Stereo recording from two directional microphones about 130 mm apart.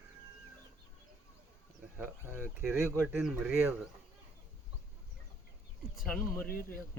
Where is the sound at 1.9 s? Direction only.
15° right (ahead or behind).